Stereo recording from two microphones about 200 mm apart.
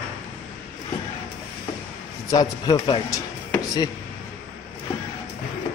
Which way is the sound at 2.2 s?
20° left (ahead or behind).